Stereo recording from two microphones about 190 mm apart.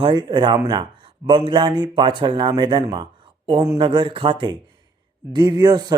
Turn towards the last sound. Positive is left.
turn(degrees=-20)  # may be behind; listen again after turning